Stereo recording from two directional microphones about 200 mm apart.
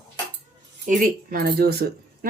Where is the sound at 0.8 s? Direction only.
40° right (ahead or behind).